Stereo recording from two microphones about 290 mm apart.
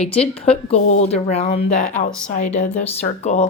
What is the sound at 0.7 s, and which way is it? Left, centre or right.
A woman's voice, left.